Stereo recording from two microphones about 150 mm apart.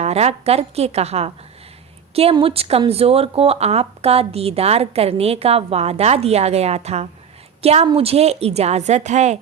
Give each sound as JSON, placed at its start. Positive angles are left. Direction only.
{"t": 0.0, "sound": "speech", "side_deg": -45}
{"t": 2.3, "sound": "a woman's voice", "side_deg": -40}